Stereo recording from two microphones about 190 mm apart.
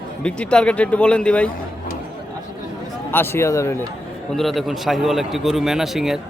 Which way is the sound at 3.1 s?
10° left (ahead or behind).